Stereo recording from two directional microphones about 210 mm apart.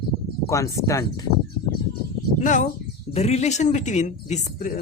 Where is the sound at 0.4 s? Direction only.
15° left (ahead or behind).